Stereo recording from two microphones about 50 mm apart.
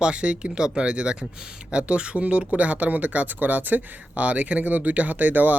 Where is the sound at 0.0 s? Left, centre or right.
Right.